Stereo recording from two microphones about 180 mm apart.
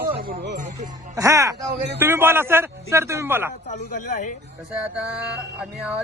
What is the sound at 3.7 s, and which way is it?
Speech, 45° left (ahead or behind).